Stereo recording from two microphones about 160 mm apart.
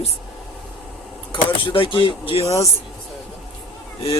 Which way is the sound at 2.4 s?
20° left (ahead or behind).